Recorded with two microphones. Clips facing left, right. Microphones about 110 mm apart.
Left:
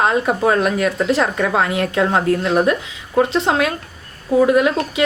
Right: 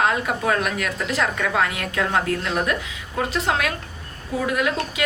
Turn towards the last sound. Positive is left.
turn(degrees=25)  # may be behind; listen again after turning